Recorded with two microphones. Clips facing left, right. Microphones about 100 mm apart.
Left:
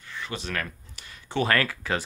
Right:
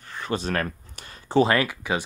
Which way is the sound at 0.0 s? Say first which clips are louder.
Right 7 dB; 45° right (ahead or behind).